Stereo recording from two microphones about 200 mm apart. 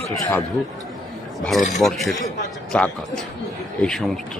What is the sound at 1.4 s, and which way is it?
Speech, centre (ahead or behind).